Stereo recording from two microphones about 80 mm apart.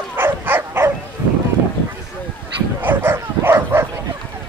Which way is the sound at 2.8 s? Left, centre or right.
Right.